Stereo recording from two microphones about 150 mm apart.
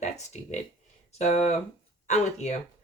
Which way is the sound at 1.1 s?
45° left (ahead or behind).